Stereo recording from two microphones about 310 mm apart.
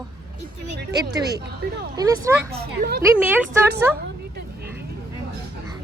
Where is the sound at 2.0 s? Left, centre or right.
Centre.